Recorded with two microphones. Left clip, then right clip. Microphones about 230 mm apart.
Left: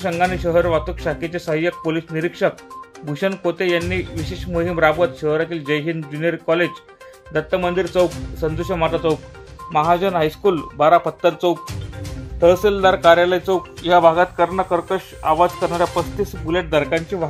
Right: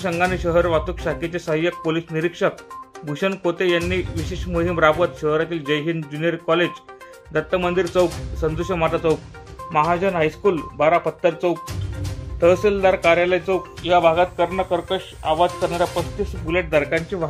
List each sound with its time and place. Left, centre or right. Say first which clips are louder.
0.0 s speech: left 2 dB; centre
13.8 s speech: left 3 dB; left
14.6 s speech: left 2 dB; centre